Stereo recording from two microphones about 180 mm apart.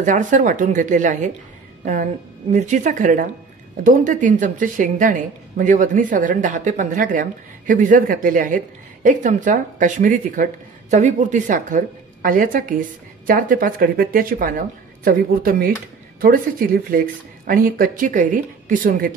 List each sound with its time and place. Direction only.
0.0 s a woman's voice: 45° right (ahead or behind)
2.5 s a woman's voice: 40° right (ahead or behind)